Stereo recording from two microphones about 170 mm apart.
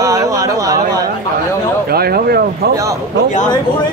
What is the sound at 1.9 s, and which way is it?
Speech, 65° right (ahead or behind).